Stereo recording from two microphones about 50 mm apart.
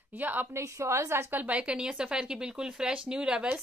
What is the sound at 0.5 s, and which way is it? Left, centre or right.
Speech, right.